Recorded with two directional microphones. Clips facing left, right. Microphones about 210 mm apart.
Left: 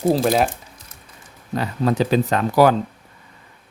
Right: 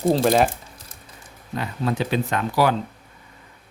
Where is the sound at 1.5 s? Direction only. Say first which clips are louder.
Left 5 dB; 40° left (ahead or behind).